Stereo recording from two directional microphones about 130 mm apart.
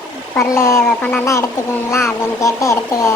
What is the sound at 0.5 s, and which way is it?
A child's voice, 20° left (ahead or behind).